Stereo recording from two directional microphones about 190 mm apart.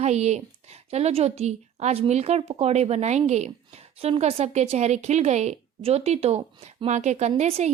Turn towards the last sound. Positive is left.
turn(degrees=-35)  # may be behind; listen again after turning